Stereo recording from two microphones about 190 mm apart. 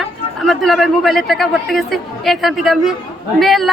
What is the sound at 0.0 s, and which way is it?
A man's voice, centre (ahead or behind).